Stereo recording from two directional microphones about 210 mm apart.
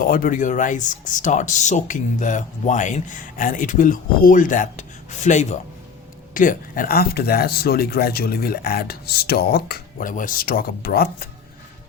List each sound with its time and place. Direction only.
0.0 s speech: 40° left (ahead or behind)